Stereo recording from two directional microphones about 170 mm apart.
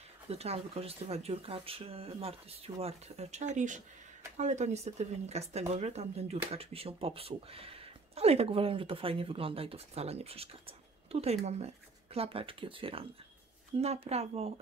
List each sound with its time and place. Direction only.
0.3 s speech: 40° right (ahead or behind)